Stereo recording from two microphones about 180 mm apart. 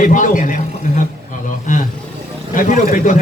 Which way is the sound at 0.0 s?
45° left (ahead or behind).